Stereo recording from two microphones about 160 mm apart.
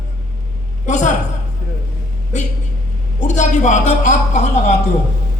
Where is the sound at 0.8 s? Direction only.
50° left (ahead or behind).